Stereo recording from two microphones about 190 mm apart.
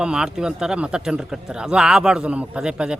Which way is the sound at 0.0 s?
5° right (ahead or behind).